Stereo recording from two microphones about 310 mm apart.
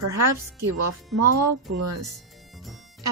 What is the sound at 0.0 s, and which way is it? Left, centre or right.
A woman's voice, right.